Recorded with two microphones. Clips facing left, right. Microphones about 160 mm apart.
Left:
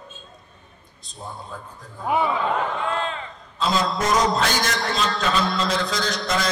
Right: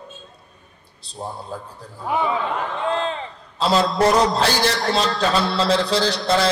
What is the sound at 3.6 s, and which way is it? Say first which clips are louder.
Speech: right 5 dB; 35° right (ahead or behind).